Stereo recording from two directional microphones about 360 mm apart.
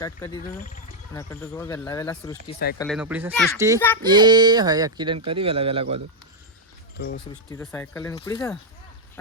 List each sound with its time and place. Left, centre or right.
0.0 s speech: centre
6.9 s speech: left
7.5 s speech: centre